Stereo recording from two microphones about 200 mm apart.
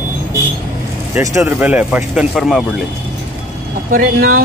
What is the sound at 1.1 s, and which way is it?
Speech, 15° right (ahead or behind).